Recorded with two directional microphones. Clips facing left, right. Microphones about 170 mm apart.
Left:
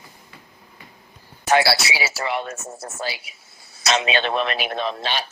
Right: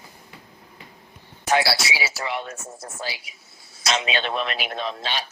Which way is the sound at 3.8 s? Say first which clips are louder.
Left 4 dB; 65° left (ahead or behind).